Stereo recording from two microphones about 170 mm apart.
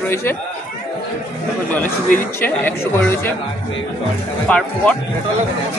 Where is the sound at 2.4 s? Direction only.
10° left (ahead or behind).